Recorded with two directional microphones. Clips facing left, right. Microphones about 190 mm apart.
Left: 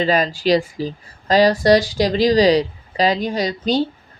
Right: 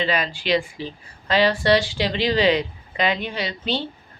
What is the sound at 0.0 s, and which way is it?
Speech, 40° left (ahead or behind).